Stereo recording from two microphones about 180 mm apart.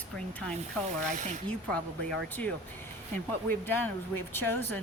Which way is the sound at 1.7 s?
5° left (ahead or behind).